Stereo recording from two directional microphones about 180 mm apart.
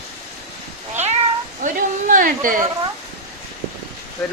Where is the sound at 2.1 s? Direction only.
50° right (ahead or behind).